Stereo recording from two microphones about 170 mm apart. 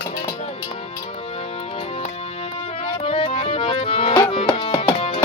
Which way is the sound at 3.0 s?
35° left (ahead or behind).